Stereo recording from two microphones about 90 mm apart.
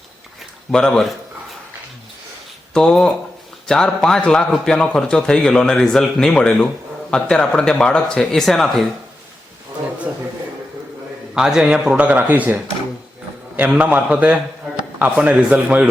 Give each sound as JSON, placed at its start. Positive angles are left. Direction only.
{"t": 0.7, "sound": "a man's voice", "side_deg": 10}
{"t": 2.7, "sound": "a man's voice", "side_deg": 5}
{"t": 11.3, "sound": "speech", "side_deg": -5}
{"t": 13.7, "sound": "speech", "side_deg": -10}